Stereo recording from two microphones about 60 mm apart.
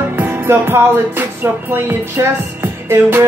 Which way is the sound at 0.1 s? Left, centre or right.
Right.